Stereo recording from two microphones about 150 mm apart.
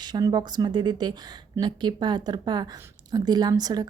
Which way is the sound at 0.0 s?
25° right (ahead or behind).